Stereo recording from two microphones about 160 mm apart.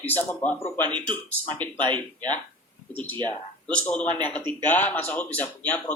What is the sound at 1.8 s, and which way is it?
Speech, 30° right (ahead or behind).